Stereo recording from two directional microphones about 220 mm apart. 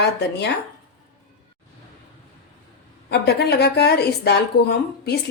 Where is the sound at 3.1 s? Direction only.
45° left (ahead or behind).